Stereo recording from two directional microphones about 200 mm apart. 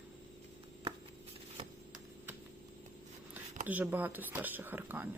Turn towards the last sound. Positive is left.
turn(degrees=-10)  # may be behind; listen again after turning